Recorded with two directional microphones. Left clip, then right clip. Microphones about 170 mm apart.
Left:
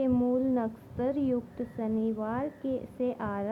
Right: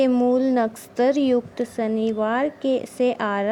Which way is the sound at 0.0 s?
35° right (ahead or behind).